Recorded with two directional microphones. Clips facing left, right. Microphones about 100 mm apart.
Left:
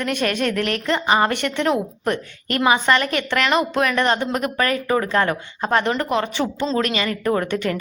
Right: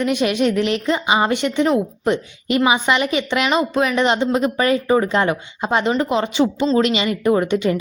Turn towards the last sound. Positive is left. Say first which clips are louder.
# right 4 dB
turn(degrees=-15)  # may be behind; listen again after turning